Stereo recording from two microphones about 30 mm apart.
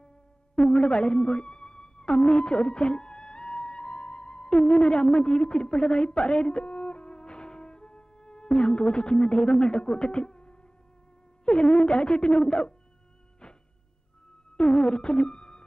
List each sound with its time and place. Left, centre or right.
0.6 s music: left
11.4 s a sound: left
14.6 s music: left